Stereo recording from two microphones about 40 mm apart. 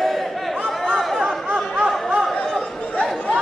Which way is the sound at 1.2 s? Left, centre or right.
Right.